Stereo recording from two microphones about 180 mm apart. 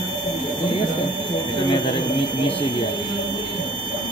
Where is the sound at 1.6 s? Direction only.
25° left (ahead or behind).